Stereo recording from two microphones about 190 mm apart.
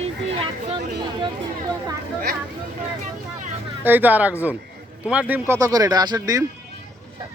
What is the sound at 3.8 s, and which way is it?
Speech, 10° right (ahead or behind).